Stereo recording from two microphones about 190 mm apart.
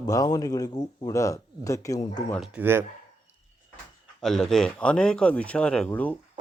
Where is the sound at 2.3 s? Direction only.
5° right (ahead or behind).